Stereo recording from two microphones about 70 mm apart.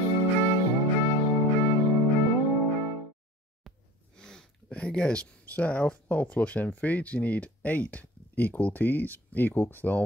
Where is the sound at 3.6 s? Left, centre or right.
Centre.